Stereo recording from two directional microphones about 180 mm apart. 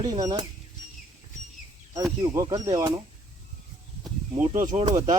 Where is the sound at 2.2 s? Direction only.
20° right (ahead or behind).